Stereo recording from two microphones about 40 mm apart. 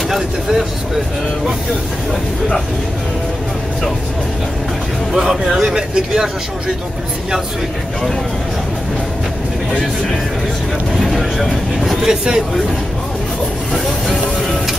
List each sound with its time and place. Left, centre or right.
0.1 s speech: centre
5.1 s speech: centre
11.0 s speech: centre
12.0 s speech: centre